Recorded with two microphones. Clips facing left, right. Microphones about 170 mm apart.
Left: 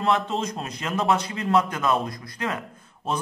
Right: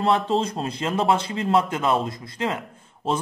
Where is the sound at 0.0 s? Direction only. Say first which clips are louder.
Right 3 dB; 30° right (ahead or behind).